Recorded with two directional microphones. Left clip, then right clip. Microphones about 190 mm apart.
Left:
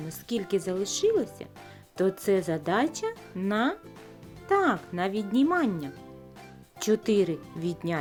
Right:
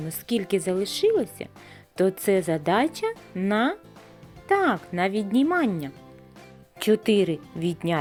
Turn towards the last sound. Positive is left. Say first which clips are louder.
# right 5 dB
turn(degrees=-20)  # may be behind; listen again after turning